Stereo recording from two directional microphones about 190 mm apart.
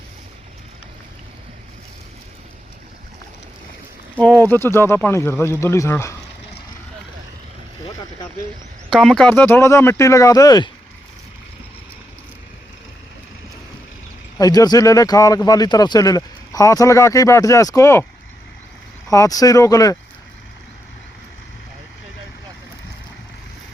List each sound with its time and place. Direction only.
4.4 s speech: 10° left (ahead or behind)
8.9 s speech: centre (ahead or behind); by 10.7 s 20° left (ahead or behind)
14.3 s speech: 20° left (ahead or behind)
19.0 s speech: 15° left (ahead or behind)